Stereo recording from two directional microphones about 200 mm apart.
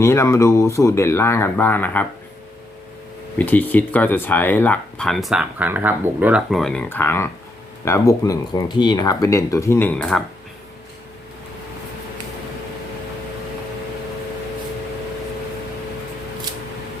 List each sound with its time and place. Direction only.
0.0 s speech: 15° left (ahead or behind)
3.3 s speech: 10° left (ahead or behind)